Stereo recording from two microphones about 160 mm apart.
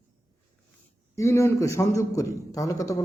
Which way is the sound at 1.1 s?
20° left (ahead or behind).